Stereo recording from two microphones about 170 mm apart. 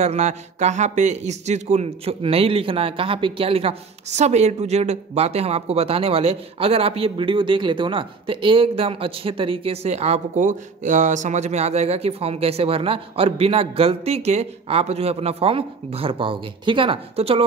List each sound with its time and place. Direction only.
0.0 s speech: 40° right (ahead or behind)